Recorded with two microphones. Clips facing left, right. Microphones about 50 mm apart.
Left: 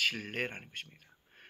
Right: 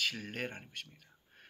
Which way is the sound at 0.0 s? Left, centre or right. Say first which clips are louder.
Left 3 dB; left.